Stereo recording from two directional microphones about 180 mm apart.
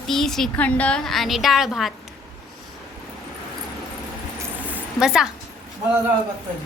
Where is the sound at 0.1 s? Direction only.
Centre (ahead or behind).